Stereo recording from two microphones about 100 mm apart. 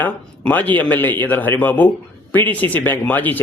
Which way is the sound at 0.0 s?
15° left (ahead or behind).